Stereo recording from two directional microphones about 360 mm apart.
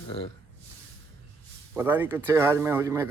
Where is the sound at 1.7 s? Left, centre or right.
Centre.